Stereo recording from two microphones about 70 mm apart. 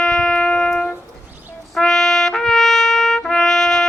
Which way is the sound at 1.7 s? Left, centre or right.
Centre.